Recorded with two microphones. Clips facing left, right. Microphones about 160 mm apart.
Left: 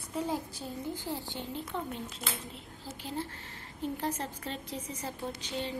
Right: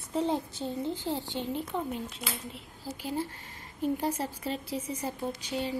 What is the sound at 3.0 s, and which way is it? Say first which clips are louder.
Speech: right 4 dB; 10° right (ahead or behind).